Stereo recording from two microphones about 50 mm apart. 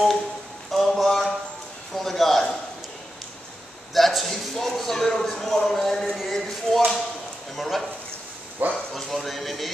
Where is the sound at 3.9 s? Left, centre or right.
Centre.